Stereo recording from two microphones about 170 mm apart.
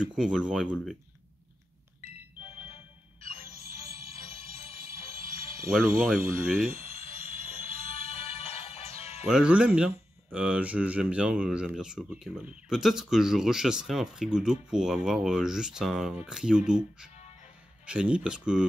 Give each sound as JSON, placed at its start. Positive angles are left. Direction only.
{"t": 0.0, "sound": "speech", "side_deg": -5}
{"t": 3.2, "sound": "music", "side_deg": 35}
{"t": 4.8, "sound": "a sound", "side_deg": 35}
{"t": 5.9, "sound": "speech", "side_deg": 0}
{"t": 6.6, "sound": "music", "side_deg": 40}
{"t": 9.2, "sound": "speech", "side_deg": -5}